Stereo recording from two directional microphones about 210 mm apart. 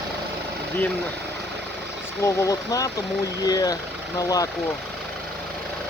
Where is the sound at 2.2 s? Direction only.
15° left (ahead or behind).